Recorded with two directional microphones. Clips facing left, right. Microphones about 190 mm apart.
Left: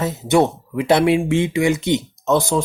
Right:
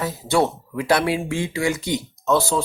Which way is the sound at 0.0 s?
20° left (ahead or behind).